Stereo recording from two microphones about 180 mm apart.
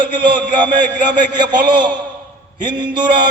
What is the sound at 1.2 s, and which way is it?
A man's voice, 25° right (ahead or behind).